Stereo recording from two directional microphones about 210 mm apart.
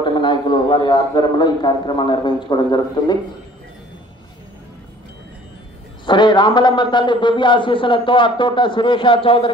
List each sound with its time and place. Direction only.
0.0 s a man's voice: 20° left (ahead or behind)
6.0 s a man's voice: 20° left (ahead or behind)